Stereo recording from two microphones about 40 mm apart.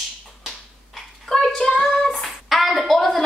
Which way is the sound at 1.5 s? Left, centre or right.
Centre.